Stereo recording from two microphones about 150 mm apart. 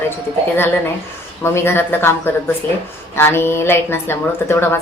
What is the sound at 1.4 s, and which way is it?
A woman's voice, 15° left (ahead or behind).